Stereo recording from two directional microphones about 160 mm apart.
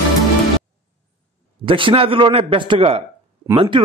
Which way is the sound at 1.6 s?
35° right (ahead or behind).